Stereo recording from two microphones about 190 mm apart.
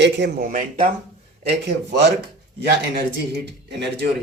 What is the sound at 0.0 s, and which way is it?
Speech, 65° right (ahead or behind).